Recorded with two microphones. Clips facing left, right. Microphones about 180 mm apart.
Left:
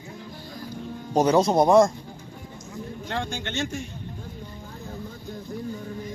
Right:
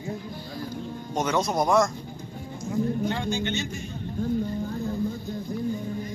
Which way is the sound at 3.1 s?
80° left.